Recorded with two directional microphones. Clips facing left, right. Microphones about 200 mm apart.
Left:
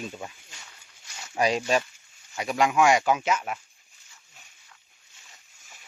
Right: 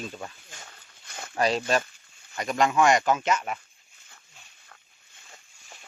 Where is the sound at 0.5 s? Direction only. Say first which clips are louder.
Right 4 dB; 50° right (ahead or behind).